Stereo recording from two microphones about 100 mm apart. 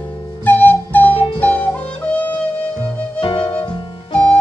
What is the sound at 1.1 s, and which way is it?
Music, 70° left (ahead or behind).